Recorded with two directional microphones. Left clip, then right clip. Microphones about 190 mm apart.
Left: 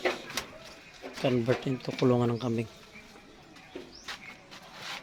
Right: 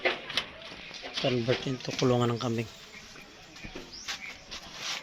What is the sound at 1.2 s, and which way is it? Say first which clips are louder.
Speech: left 1 dB; 5° left (ahead or behind).